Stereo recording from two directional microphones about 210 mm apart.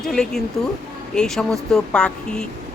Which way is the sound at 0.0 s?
Centre (ahead or behind).